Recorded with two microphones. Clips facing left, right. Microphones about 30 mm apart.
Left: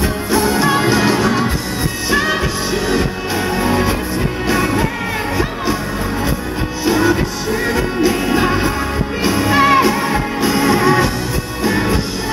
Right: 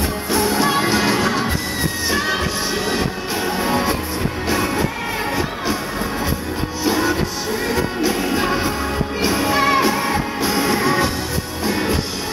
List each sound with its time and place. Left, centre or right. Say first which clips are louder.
0.9 s music: left 3 dB; centre
2.0 s music: left 5 dB; centre
8.1 s music: left 4 dB; centre
9.5 s music: left 6 dB; left
9.8 s music: left 3 dB; centre